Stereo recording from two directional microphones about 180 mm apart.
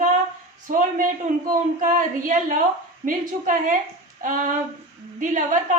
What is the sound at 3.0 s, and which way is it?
A woman's voice, 45° right (ahead or behind).